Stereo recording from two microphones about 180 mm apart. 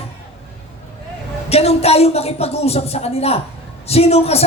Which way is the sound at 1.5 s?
35° left (ahead or behind).